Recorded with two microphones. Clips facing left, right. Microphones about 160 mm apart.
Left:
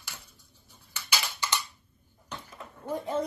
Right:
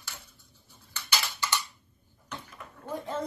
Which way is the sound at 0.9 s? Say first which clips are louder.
Even; 10° left (ahead or behind).